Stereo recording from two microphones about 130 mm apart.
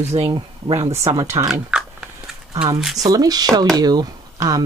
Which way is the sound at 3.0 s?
30° right (ahead or behind).